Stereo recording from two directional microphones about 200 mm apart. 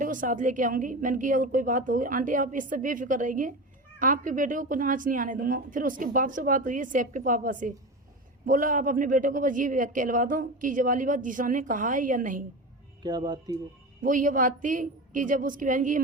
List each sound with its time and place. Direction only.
0.0 s a man's voice: 40° right (ahead or behind)
13.0 s speech: 20° right (ahead or behind)
14.0 s a man's voice: 40° right (ahead or behind)